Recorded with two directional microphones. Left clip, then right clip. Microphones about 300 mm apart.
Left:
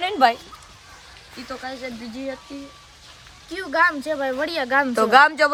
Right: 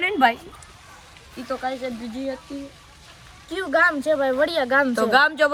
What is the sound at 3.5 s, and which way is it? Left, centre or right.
Speech, centre.